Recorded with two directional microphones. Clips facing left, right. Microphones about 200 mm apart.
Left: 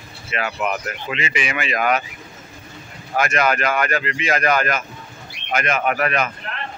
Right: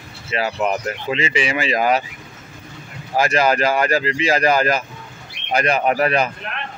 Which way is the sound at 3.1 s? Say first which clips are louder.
Right 3 dB; 30° right (ahead or behind).